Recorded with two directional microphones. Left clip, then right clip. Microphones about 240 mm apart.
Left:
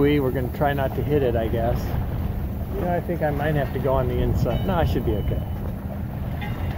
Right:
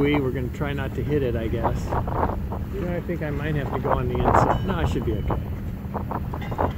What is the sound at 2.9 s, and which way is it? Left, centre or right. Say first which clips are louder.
Speech: left 7 dB; centre.